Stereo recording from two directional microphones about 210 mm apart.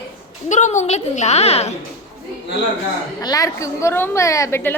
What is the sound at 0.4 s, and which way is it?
A woman's voice, 35° left (ahead or behind).